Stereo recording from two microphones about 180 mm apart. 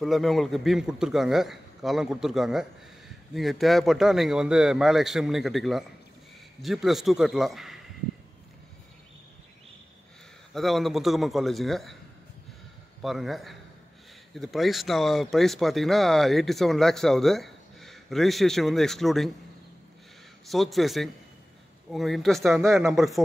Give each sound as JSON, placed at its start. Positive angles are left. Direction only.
{"t": 0.0, "sound": "speech", "side_deg": 0}
{"t": 10.5, "sound": "speech", "side_deg": 0}
{"t": 13.0, "sound": "speech", "side_deg": 0}
{"t": 20.4, "sound": "speech", "side_deg": 0}